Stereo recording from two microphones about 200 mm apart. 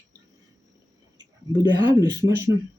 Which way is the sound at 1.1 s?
20° right (ahead or behind).